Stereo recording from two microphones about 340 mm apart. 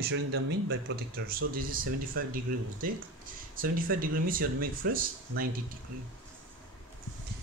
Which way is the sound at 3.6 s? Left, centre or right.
Right.